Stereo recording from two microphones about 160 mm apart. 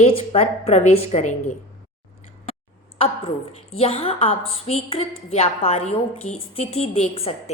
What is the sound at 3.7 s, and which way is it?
A woman's voice, 35° left (ahead or behind).